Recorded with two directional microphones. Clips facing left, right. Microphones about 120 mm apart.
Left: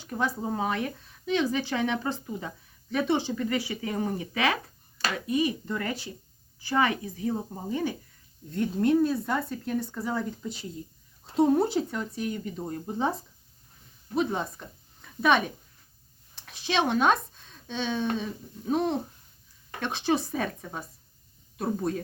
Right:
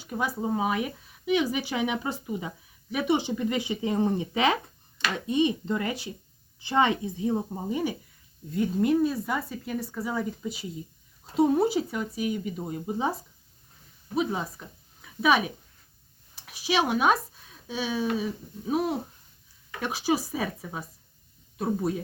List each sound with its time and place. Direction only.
0.0 s speech: 10° right (ahead or behind)
8.4 s speech: 5° right (ahead or behind)
14.2 s speech: 5° right (ahead or behind)